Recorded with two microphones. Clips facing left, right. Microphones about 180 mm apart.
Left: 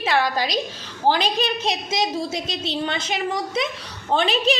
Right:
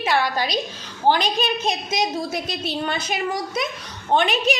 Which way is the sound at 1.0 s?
30° left (ahead or behind).